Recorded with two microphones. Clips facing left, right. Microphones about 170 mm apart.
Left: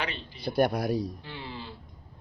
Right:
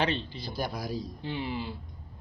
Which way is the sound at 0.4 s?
65° left (ahead or behind).